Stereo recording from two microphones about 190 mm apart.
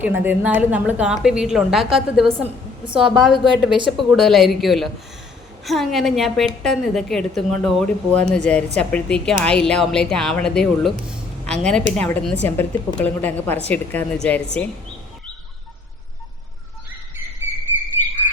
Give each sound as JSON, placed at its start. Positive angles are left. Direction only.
{"t": 0.0, "sound": "speech", "side_deg": -10}
{"t": 2.2, "sound": "a woman's voice", "side_deg": -30}
{"t": 3.0, "sound": "a woman's voice", "side_deg": 0}